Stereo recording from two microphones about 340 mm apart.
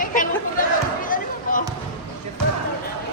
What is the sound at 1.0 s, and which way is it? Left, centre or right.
Basketball bounce, left.